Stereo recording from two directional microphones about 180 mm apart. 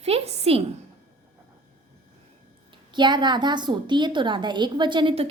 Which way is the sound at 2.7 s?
25° right (ahead or behind).